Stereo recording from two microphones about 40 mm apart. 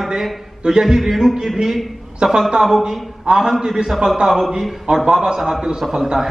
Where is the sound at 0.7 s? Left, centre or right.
Centre.